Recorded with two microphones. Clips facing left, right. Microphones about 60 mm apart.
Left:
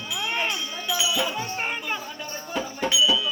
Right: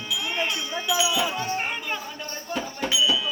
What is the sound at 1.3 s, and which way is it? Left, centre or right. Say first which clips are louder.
Music: right 1 dB; centre.